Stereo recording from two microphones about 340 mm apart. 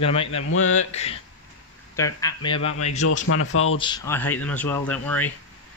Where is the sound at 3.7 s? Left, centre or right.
Centre.